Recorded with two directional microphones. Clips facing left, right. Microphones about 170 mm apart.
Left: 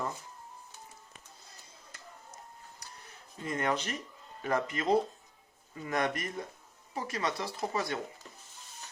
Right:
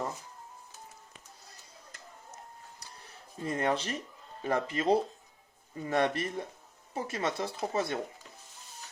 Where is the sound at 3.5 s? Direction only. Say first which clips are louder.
Right 1 dB; 30° right (ahead or behind).